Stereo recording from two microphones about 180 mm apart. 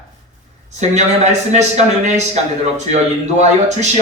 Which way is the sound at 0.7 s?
40° right (ahead or behind).